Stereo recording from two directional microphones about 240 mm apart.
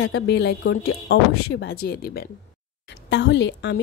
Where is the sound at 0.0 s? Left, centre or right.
Left.